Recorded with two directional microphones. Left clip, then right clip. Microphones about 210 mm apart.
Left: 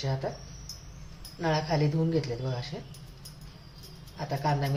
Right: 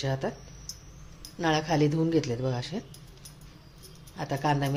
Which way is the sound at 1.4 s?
55° right (ahead or behind).